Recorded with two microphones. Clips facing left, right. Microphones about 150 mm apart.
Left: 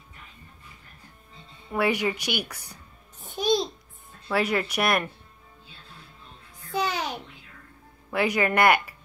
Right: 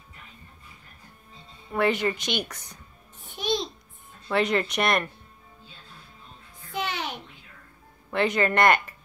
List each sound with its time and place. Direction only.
1.7 s speech: 10° left (ahead or behind)
3.2 s babbling: 40° left (ahead or behind)
4.3 s speech: 5° left (ahead or behind)
6.7 s music: 40° left (ahead or behind)
8.1 s speech: 10° left (ahead or behind)